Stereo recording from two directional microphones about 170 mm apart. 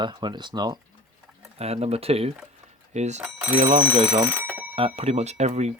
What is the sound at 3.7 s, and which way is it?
Speech, 25° right (ahead or behind).